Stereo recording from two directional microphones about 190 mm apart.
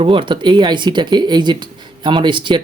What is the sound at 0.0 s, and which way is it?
Speech, 25° right (ahead or behind).